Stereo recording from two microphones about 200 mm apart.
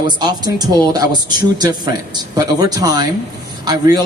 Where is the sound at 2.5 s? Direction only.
20° right (ahead or behind).